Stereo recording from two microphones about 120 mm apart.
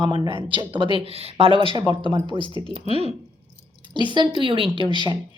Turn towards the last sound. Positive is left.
turn(degrees=-40)  # may be behind; listen again after turning